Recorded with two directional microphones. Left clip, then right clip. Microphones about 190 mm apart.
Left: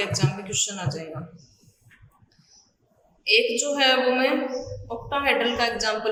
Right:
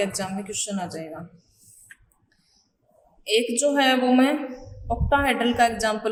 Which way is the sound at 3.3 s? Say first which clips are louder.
Left 1 dB; 40° right (ahead or behind).